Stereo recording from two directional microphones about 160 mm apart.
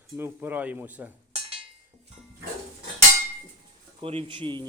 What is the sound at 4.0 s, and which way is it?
Speech, 35° right (ahead or behind).